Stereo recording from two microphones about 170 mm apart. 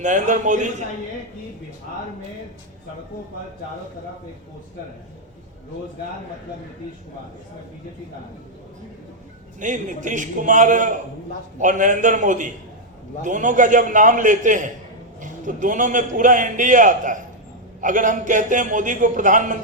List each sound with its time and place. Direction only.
0.0 s a man's voice: 45° right (ahead or behind)
9.6 s a man's voice: 50° right (ahead or behind)